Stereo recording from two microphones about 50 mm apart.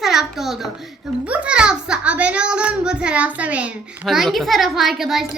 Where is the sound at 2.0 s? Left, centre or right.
Right.